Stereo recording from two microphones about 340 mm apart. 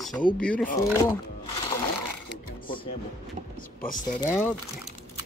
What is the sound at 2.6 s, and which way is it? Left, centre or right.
Speech, left.